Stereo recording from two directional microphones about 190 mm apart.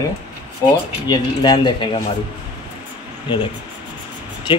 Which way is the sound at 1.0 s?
20° left (ahead or behind).